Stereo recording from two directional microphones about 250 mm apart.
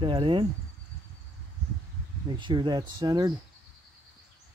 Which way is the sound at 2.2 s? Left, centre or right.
Centre.